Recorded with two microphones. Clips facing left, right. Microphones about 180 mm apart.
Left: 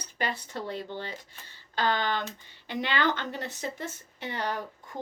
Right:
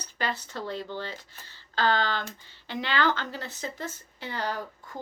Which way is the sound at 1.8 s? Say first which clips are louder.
Right 2 dB; 20° left (ahead or behind).